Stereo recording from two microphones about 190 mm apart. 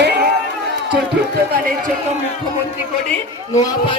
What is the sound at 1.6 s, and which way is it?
Speech, 45° right (ahead or behind).